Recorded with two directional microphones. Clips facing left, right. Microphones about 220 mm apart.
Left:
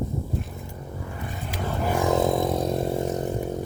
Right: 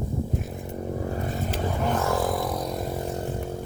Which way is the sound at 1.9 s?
15° left (ahead or behind).